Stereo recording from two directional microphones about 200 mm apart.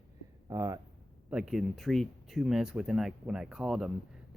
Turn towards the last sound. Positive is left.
turn(degrees=-5)  # may be behind; listen again after turning